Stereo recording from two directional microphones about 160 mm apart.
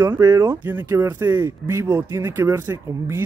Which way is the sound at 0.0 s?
20° right (ahead or behind).